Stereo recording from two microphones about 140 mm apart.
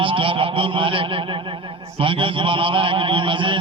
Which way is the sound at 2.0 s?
40° right (ahead or behind).